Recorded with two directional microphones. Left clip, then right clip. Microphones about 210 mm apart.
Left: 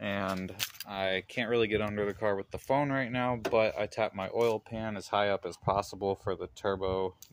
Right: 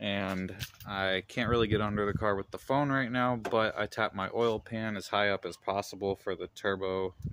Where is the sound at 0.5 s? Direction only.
60° left (ahead or behind).